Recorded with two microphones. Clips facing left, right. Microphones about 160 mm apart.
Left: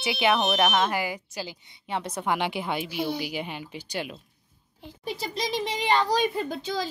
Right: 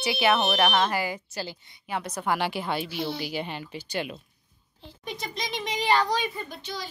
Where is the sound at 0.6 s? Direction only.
5° left (ahead or behind).